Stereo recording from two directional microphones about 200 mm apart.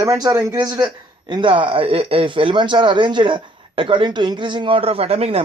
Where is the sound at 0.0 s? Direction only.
15° right (ahead or behind).